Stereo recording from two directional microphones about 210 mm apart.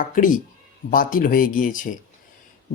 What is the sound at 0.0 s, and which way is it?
Speech, 40° left (ahead or behind).